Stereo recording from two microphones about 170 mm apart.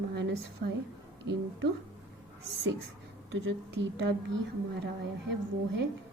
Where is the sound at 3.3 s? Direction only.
90° right.